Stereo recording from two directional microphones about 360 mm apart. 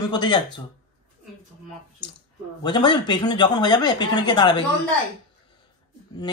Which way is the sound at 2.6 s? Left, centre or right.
Centre.